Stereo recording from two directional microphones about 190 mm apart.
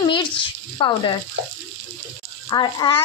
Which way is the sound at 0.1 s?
25° left (ahead or behind).